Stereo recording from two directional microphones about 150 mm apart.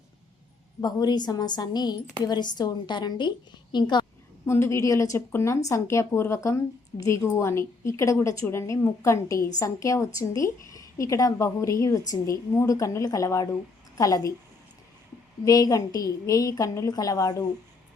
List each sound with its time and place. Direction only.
0.8 s speech: 25° left (ahead or behind)
4.4 s a woman's voice: 20° left (ahead or behind)
15.4 s speech: 25° left (ahead or behind)